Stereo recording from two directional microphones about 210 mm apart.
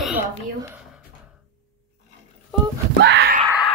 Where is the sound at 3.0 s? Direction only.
50° right (ahead or behind).